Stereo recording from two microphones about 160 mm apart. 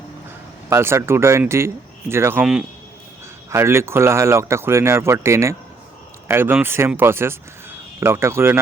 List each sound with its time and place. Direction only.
0.7 s speech: 15° right (ahead or behind)